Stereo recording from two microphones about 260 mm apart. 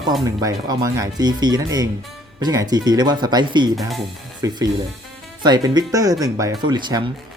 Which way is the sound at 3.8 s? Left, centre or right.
Centre.